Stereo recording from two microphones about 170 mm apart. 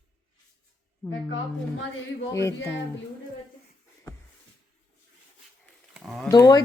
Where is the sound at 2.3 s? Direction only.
15° left (ahead or behind).